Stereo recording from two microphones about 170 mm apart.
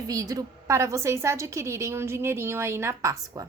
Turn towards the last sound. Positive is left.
turn(degrees=-15)  # may be behind; listen again after turning